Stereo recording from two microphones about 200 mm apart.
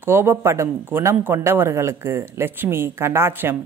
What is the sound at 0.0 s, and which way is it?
A man's voice, 10° right (ahead or behind).